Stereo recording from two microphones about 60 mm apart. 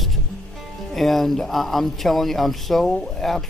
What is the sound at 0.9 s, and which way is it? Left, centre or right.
Speech, centre.